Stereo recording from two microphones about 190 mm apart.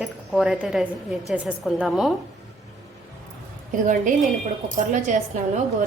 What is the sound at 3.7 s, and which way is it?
A woman's voice, 45° right (ahead or behind).